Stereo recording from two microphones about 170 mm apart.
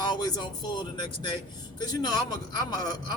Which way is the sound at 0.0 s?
25° left (ahead or behind).